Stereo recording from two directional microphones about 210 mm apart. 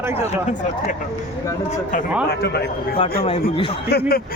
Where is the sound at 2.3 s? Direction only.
50° left (ahead or behind).